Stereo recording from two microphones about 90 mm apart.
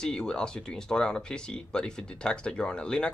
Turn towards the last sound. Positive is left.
turn(degrees=10)  # may be behind; listen again after turning